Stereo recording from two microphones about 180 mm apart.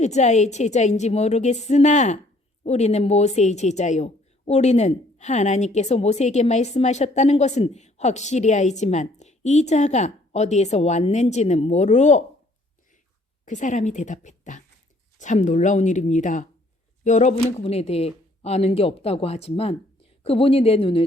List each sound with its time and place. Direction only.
0.0 s speech: 40° left (ahead or behind)
13.4 s a woman's voice: 45° left (ahead or behind)